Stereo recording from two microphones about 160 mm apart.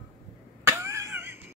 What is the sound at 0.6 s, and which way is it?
Cat, 15° right (ahead or behind).